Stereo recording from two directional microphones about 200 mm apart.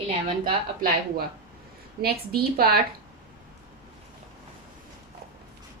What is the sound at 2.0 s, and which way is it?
Speech, 50° right (ahead or behind).